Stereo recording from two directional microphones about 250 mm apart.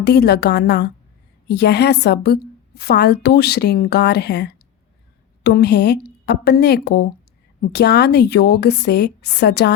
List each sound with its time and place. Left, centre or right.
0.0 s a woman's voice: left